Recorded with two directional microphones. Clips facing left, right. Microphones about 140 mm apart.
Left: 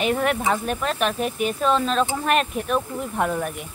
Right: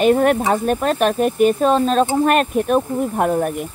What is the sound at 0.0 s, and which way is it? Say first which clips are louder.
Speech: right 7 dB; 40° right (ahead or behind).